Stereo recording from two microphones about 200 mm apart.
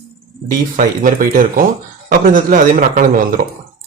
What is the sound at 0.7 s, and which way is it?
Speech, 45° right (ahead or behind).